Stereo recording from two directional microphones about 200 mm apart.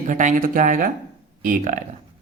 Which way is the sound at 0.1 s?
40° right (ahead or behind).